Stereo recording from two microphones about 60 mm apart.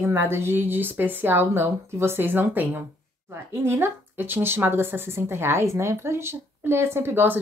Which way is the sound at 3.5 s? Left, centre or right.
Right.